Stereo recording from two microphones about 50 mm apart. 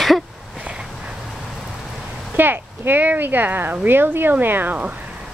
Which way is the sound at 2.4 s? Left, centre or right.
Right.